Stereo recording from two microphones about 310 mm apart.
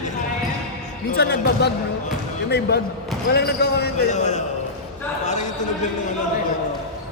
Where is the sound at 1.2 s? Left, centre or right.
Left.